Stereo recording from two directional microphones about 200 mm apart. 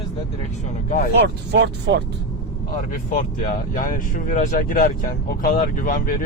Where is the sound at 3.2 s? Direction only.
40° left (ahead or behind).